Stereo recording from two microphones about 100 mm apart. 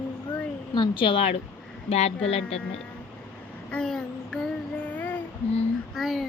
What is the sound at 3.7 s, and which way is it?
Child singing, 5° left (ahead or behind).